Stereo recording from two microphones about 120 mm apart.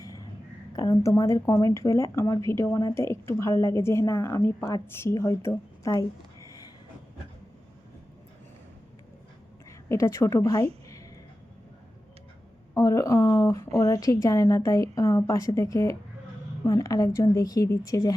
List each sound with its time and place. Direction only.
0.0 s a sound: 30° left (ahead or behind)
0.8 s speech: 30° left (ahead or behind)
9.6 s a woman's voice: 25° left (ahead or behind)
12.7 s speech: 25° left (ahead or behind)